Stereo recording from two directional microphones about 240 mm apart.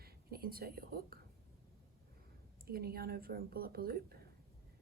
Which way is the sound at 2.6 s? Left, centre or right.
Right.